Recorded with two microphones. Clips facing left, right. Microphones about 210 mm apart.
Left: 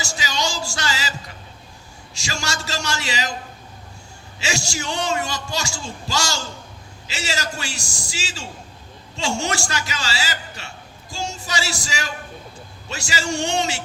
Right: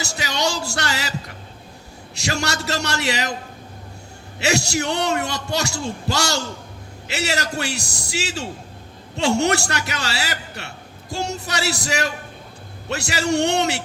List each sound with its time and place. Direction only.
0.0 s speech: 60° right (ahead or behind)
2.1 s a man's voice: 60° right (ahead or behind)
4.4 s a man's voice: 60° right (ahead or behind)